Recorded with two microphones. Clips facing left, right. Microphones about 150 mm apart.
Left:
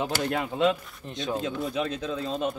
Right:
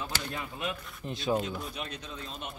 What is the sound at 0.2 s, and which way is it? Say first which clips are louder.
Speech: left 12 dB; 75° left (ahead or behind).